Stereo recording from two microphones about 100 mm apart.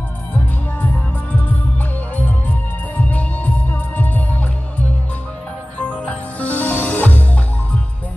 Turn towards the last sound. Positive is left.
turn(degrees=15)  # may be behind; listen again after turning